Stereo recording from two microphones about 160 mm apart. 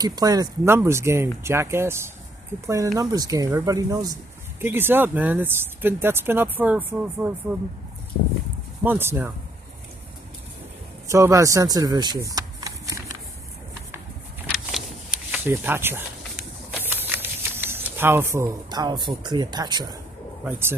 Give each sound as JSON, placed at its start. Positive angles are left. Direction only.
{"t": 0.0, "sound": "speech", "side_deg": -25}
{"t": 8.8, "sound": "speech", "side_deg": -15}
{"t": 11.1, "sound": "speech", "side_deg": -20}
{"t": 14.5, "sound": "a sound", "side_deg": -5}
{"t": 16.8, "sound": "speech", "side_deg": -15}